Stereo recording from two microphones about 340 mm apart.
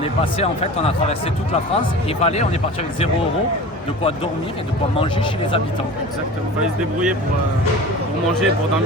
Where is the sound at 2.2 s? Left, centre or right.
Centre.